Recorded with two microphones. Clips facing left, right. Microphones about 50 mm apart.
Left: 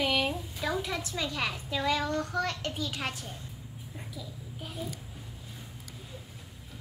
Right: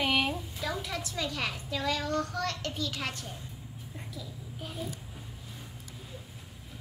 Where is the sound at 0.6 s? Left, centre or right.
Centre.